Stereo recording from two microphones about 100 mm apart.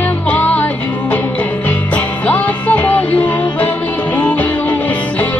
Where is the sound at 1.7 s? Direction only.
15° left (ahead or behind).